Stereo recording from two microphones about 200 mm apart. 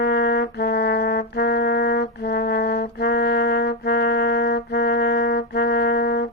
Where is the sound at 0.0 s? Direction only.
55° left (ahead or behind).